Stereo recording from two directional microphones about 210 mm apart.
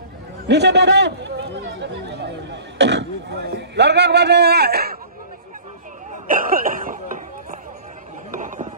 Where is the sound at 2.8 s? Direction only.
55° right (ahead or behind).